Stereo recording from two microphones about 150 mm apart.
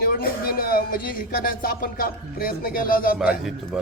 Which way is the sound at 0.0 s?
80° left.